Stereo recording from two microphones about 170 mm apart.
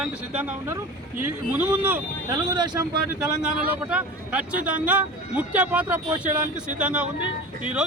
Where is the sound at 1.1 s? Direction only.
10° right (ahead or behind).